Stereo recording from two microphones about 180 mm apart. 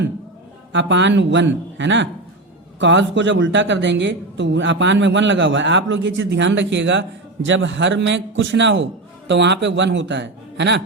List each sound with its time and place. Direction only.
0.7 s a man's voice: 90° right